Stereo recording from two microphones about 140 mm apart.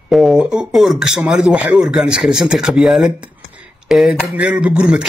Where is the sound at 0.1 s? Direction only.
Centre (ahead or behind).